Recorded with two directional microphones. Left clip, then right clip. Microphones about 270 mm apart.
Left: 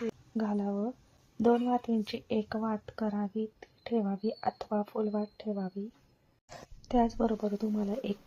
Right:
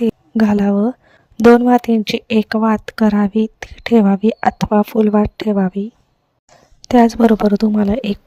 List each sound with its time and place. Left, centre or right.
0.3 s speech: right
6.5 s a sound: centre
6.8 s speech: right